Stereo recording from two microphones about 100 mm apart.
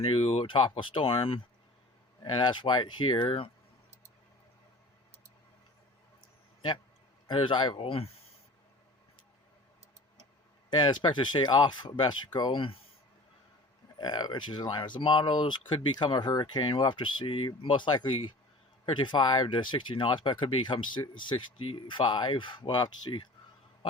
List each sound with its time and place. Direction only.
0.0 s speech: 85° left
0.4 s speech: 55° left (ahead or behind)
2.2 s speech: 50° left (ahead or behind)
7.3 s speech: 55° left (ahead or behind); by 8.1 s 70° left (ahead or behind)
10.7 s speech: 50° left (ahead or behind)
14.0 s speech: 45° left (ahead or behind)